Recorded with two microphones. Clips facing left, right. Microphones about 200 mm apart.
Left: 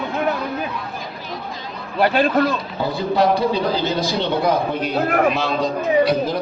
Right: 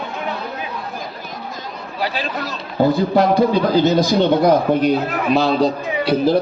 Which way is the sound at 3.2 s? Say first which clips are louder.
Right 2 dB; 50° right (ahead or behind).